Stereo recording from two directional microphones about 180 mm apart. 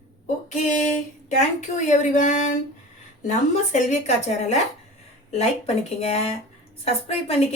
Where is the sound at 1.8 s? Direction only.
45° left (ahead or behind).